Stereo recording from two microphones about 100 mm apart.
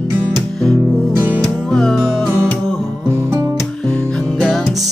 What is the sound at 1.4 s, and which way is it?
Music, 5° left (ahead or behind).